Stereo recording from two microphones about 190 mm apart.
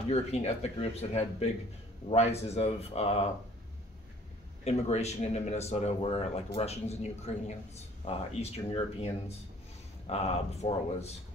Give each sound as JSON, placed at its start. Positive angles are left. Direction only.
{"t": 0.1, "sound": "speech", "side_deg": 35}
{"t": 4.6, "sound": "speech", "side_deg": 35}